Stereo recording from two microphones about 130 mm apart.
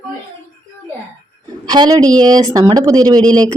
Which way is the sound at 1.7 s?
30° right (ahead or behind).